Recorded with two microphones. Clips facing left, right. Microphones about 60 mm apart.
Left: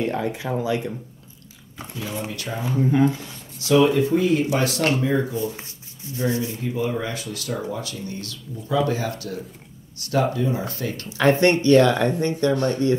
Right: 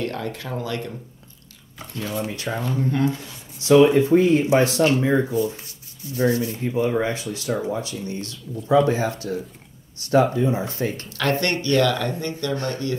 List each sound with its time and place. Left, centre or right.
0.0 s speech: centre
2.0 s speech: centre
3.5 s speech: right
6.3 s speech: left
6.9 s speech: right
11.1 s speech: centre